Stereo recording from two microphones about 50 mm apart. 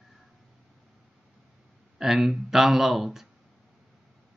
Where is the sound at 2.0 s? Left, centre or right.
Centre.